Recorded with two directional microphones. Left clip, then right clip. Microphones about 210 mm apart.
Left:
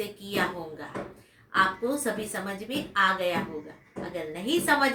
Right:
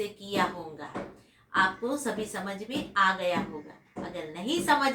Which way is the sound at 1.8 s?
5° left (ahead or behind).